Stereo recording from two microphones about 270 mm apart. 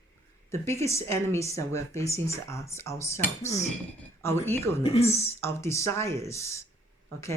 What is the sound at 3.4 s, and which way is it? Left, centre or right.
Speech, left.